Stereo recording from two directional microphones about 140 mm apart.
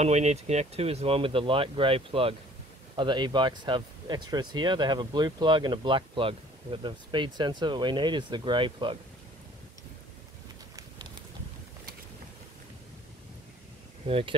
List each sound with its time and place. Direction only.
0.0 s speech: 50° right (ahead or behind); by 8.9 s 35° right (ahead or behind)
14.0 s speech: 40° right (ahead or behind)